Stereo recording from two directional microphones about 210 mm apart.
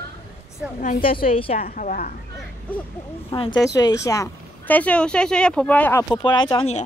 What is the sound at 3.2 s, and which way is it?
Speech, 25° left (ahead or behind).